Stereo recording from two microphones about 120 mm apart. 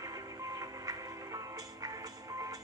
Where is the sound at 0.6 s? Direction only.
30° right (ahead or behind).